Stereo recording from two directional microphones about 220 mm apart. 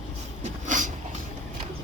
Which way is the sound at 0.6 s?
35° right (ahead or behind).